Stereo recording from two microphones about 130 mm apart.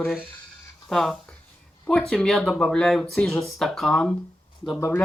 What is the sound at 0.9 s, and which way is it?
Speech, 5° left (ahead or behind).